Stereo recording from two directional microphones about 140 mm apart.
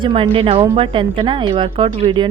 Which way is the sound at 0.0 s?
40° right (ahead or behind).